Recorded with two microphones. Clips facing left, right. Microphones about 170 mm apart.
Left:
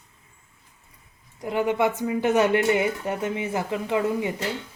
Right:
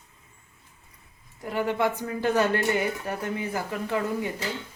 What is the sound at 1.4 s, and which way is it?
Speech, 20° left (ahead or behind).